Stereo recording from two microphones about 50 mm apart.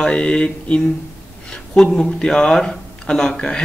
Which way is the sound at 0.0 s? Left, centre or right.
Centre.